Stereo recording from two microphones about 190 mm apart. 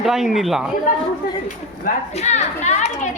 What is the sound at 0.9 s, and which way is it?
Speech, 50° left (ahead or behind).